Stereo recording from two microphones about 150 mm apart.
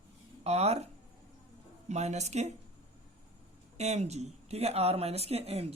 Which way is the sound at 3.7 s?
45° right (ahead or behind).